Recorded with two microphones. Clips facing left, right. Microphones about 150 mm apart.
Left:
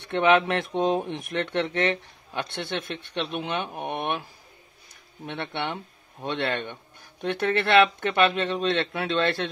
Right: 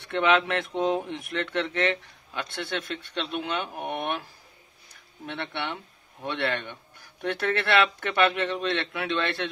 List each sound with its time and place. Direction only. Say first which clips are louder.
0.1 s speech: left 3 dB; 30° left (ahead or behind)
5.2 s speech: left 2 dB; 25° left (ahead or behind)